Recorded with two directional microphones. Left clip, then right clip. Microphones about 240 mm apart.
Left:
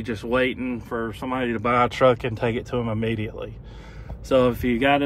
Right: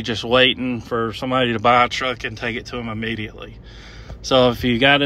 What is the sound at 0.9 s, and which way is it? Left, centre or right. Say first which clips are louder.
Speech: right 7 dB; left.